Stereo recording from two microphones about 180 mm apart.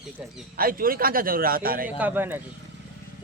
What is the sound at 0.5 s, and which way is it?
A man's voice, 55° right (ahead or behind).